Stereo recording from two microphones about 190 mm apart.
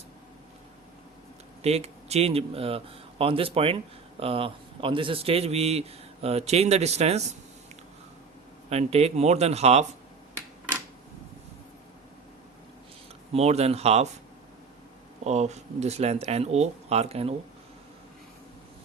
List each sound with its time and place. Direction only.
1.6 s a man's voice: 35° right (ahead or behind)
8.7 s a man's voice: 35° right (ahead or behind)
13.3 s a man's voice: 35° right (ahead or behind)
15.2 s a man's voice: 35° right (ahead or behind)